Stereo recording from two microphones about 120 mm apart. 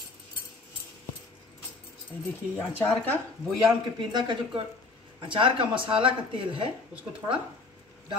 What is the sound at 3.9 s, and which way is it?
Speech, 40° right (ahead or behind).